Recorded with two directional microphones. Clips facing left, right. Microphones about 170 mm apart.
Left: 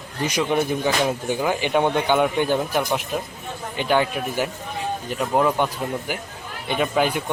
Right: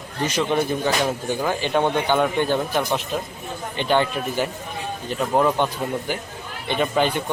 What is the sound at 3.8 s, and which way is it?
Speech, 5° left (ahead or behind).